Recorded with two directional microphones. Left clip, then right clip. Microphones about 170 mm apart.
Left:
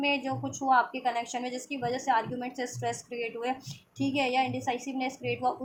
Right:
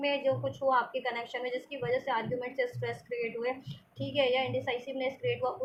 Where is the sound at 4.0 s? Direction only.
60° left (ahead or behind).